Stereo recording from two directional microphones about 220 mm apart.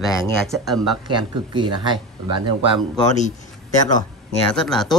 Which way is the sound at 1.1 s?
20° right (ahead or behind).